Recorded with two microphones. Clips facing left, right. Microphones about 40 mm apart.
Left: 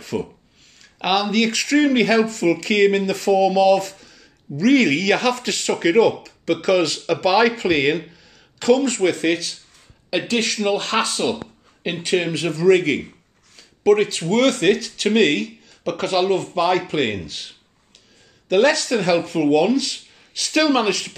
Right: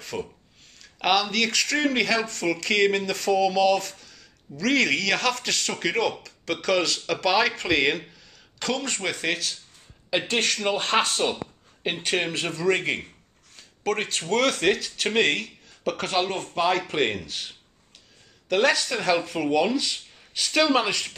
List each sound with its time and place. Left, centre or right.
0.0 s speech: centre
10.0 s speech: centre
16.9 s speech: centre